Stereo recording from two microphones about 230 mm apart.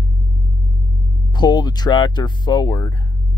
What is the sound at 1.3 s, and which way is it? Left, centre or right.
Speech, centre.